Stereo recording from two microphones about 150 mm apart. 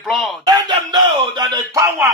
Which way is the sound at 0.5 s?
30° right (ahead or behind).